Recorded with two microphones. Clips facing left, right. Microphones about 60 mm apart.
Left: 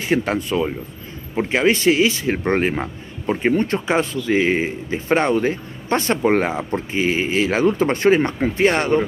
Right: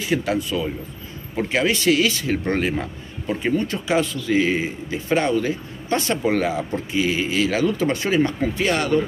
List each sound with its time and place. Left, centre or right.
0.0 s speech: left
1.3 s speech: left